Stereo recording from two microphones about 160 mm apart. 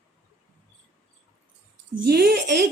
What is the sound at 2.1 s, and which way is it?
Speech, 75° right (ahead or behind).